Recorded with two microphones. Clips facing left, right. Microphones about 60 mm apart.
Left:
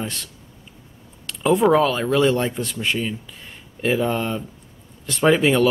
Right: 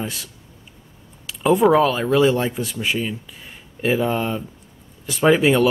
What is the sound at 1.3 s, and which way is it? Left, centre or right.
Speech, centre.